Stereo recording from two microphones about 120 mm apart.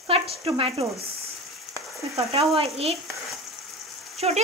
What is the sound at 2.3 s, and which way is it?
Speech, 55° right (ahead or behind).